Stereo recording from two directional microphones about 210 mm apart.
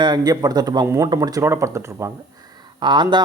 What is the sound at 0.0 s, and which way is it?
Speech, 20° right (ahead or behind).